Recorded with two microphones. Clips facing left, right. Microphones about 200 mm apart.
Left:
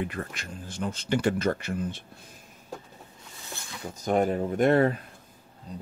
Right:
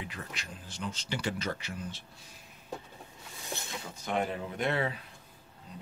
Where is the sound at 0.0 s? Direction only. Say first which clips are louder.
Left 9 dB; 55° left (ahead or behind).